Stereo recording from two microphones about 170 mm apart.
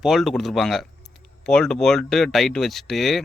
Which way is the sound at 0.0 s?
Centre (ahead or behind).